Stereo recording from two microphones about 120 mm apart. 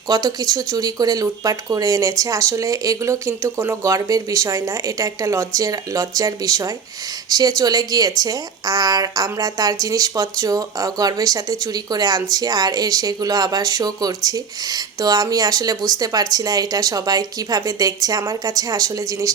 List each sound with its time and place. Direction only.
0.1 s speech: 30° right (ahead or behind)